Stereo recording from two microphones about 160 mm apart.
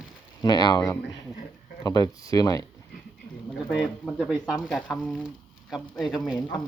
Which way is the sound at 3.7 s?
5° right (ahead or behind).